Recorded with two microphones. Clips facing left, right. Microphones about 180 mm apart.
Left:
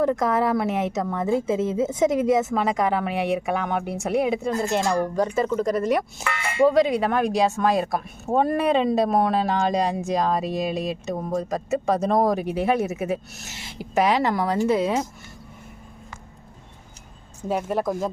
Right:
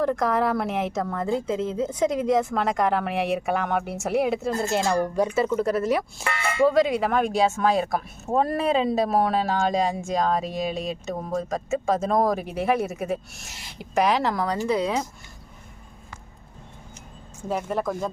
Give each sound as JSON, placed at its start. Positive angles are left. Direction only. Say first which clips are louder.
{"t": 0.0, "sound": "a woman's voice", "louder": "left 2 dB", "side_deg": 5}
{"t": 6.2, "sound": "speech", "louder": "right 1 dB", "side_deg": -35}
{"t": 6.7, "sound": "a woman's voice", "louder": "left 2 dB", "side_deg": 0}
{"t": 17.5, "sound": "a woman's voice", "louder": "left 2 dB", "side_deg": 5}